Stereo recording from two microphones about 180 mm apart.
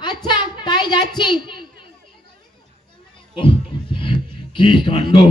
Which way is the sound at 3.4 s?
30° left (ahead or behind).